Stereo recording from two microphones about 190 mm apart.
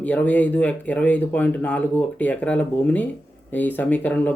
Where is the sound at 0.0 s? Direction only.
10° left (ahead or behind).